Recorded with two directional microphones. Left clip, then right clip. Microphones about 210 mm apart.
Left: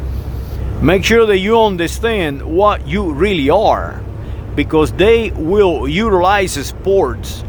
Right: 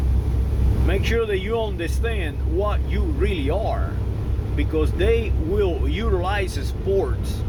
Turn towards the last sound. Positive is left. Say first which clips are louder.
# left 9 dB
turn(degrees=40)  # may be behind; listen again after turning